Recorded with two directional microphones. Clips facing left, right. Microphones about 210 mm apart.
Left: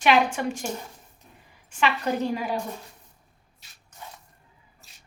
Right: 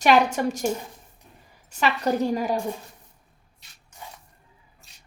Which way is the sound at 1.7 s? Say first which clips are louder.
Right 2 dB; 40° right (ahead or behind).